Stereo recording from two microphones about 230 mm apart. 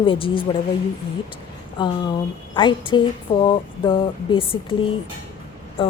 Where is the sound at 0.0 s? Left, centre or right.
Left.